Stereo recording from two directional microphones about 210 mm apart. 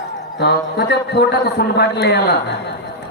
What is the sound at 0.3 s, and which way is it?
A man's voice, 50° left (ahead or behind).